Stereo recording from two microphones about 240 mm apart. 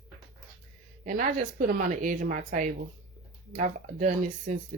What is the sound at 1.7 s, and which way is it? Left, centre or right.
Speech, right.